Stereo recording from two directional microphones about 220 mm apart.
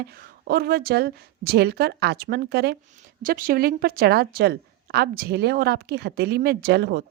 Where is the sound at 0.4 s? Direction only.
45° right (ahead or behind).